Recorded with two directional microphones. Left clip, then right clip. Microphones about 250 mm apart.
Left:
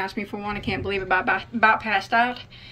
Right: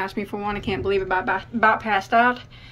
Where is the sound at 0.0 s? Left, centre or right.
Centre.